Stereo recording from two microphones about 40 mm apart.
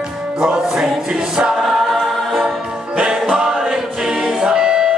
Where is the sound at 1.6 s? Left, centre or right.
Centre.